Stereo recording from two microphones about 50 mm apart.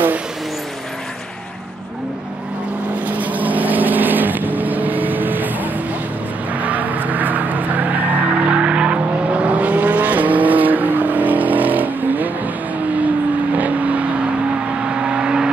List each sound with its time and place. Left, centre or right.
3.1 s vehicle: right
13.6 s vehicle: right
15.0 s vehicle: centre